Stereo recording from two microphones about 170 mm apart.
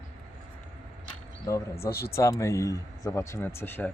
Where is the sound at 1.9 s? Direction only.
65° left (ahead or behind).